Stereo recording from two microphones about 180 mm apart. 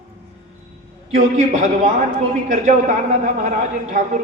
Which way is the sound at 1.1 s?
40° right (ahead or behind).